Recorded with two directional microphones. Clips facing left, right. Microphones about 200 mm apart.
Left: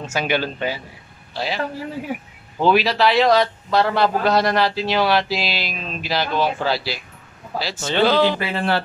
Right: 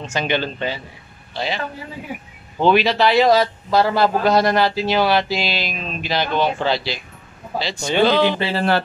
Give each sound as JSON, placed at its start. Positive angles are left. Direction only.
{"t": 0.0, "sound": "a man's voice", "side_deg": 5}
{"t": 2.6, "sound": "a man's voice", "side_deg": 0}
{"t": 7.8, "sound": "speech", "side_deg": -15}
{"t": 8.5, "sound": "speech", "side_deg": -35}